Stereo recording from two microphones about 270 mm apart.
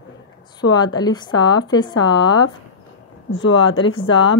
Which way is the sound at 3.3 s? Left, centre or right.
Left.